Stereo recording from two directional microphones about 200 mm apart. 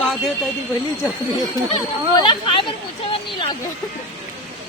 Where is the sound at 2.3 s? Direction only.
25° left (ahead or behind).